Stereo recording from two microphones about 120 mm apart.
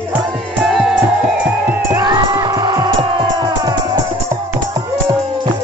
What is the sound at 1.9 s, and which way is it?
Music, 35° right (ahead or behind).